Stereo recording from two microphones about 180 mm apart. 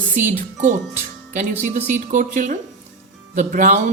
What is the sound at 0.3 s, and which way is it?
A woman's voice, 45° right (ahead or behind).